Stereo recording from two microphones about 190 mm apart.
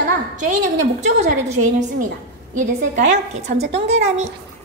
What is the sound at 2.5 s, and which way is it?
A woman's voice, 40° right (ahead or behind).